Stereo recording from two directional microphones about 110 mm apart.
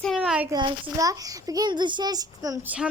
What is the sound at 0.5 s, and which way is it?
A child's voice, 35° right (ahead or behind).